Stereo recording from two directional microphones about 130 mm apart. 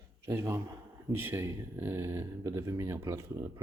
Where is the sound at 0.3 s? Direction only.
20° right (ahead or behind).